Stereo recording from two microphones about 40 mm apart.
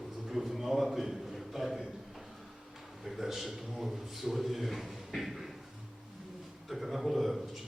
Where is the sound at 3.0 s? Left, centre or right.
Centre.